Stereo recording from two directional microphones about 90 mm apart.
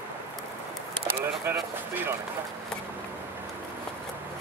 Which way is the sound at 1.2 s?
25° right (ahead or behind).